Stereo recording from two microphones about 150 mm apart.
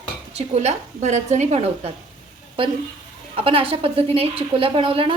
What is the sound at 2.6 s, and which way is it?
A woman's voice, 35° right (ahead or behind).